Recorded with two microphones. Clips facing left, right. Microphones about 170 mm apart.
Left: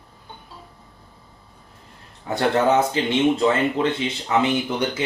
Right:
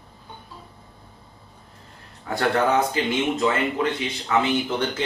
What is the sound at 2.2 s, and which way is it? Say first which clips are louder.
Speech: left 2 dB; 20° left (ahead or behind).